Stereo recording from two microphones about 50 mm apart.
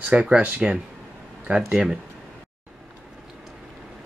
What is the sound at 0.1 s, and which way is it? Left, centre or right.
Speech, right.